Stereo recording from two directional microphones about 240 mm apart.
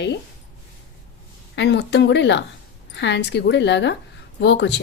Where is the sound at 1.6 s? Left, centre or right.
Left.